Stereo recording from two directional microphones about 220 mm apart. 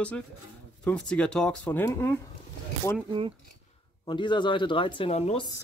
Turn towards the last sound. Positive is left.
turn(degrees=25)  # may be behind; listen again after turning